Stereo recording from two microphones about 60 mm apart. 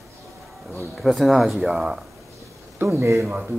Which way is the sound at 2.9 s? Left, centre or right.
Right.